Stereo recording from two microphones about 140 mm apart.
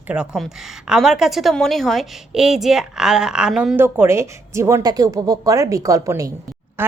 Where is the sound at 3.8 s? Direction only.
20° right (ahead or behind).